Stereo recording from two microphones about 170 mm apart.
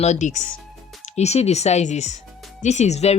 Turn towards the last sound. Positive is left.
turn(degrees=40)  # may be behind; listen again after turning